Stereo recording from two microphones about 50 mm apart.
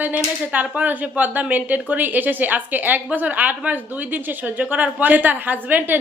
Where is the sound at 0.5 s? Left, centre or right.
Right.